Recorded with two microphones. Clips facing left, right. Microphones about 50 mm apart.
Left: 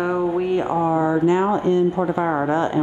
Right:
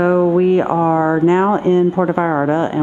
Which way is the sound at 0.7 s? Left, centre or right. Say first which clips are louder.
Right 4 dB; right.